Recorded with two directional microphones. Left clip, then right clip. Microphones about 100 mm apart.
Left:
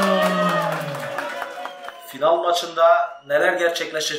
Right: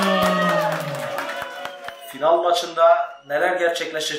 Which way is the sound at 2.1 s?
30° left (ahead or behind).